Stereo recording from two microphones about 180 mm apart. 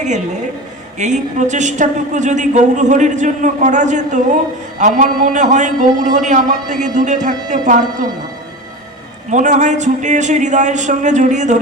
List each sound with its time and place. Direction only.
0.9 s a woman's voice: 40° right (ahead or behind)
9.3 s a woman's voice: 45° right (ahead or behind)